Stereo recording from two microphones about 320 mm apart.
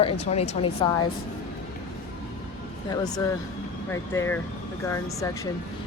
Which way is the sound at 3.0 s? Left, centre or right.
Centre.